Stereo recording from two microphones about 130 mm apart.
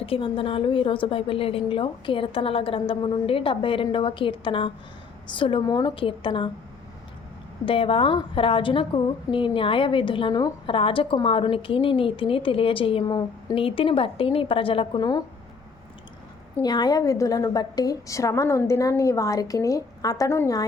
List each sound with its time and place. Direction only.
0.0 s a woman's voice: 45° left (ahead or behind)
7.6 s a woman's voice: 45° left (ahead or behind)
16.6 s a woman's voice: 30° left (ahead or behind)